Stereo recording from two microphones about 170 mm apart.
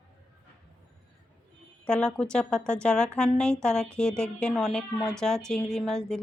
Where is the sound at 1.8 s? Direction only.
5° left (ahead or behind).